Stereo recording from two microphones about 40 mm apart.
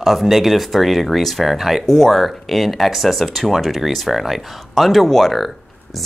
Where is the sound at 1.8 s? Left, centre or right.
Centre.